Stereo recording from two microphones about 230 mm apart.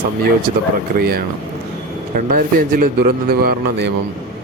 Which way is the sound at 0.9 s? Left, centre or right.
Right.